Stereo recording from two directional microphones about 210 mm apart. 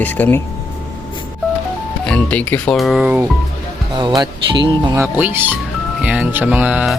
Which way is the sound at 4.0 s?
20° right (ahead or behind).